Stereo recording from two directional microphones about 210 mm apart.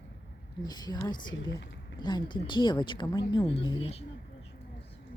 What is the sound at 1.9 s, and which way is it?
Speech, 20° left (ahead or behind).